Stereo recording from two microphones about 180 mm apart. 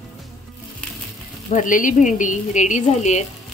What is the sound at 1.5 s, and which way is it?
Speech, 45° left (ahead or behind).